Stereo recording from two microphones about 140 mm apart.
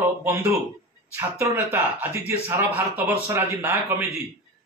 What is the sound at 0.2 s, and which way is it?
Speech, 20° right (ahead or behind).